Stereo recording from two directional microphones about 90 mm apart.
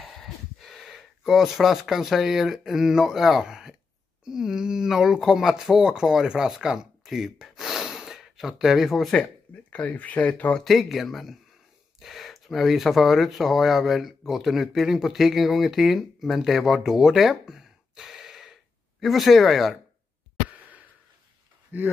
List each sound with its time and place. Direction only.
0.0 s speech: 5° left (ahead or behind)
9.1 s speech: 10° left (ahead or behind)
10.6 s speech: centre (ahead or behind)
21.7 s speech: 20° right (ahead or behind)